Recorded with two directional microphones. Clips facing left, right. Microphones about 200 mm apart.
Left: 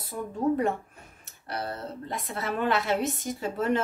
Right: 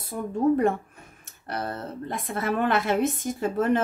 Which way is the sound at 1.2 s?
50° right (ahead or behind).